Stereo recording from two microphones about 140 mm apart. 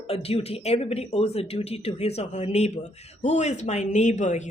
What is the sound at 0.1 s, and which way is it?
Speech, 45° left (ahead or behind).